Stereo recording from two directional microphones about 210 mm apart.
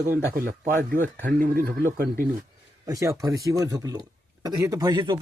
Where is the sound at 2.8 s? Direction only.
15° right (ahead or behind).